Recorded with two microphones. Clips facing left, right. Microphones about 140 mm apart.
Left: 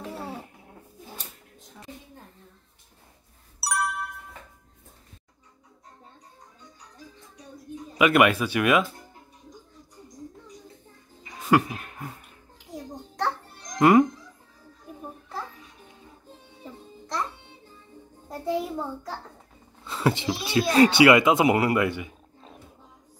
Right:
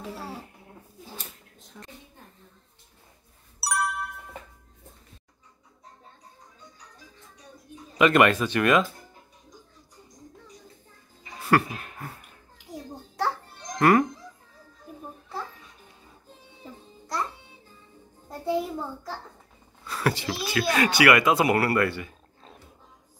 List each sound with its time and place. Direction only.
3.6 s music: centre (ahead or behind)
8.0 s speech: 10° left (ahead or behind)
11.3 s speech: 15° left (ahead or behind)
13.7 s speech: 15° left (ahead or behind)
18.4 s a sound: centre (ahead or behind)
19.8 s a sound: 20° left (ahead or behind)
20.4 s speech: 25° left (ahead or behind)